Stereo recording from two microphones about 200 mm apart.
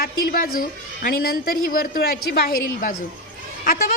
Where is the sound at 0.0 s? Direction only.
50° left (ahead or behind).